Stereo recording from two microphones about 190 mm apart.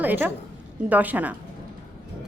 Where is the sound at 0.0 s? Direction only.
10° right (ahead or behind).